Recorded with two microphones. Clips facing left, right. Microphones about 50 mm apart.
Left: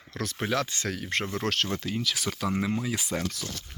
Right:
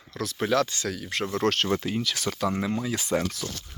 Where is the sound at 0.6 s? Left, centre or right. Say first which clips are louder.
Even; left.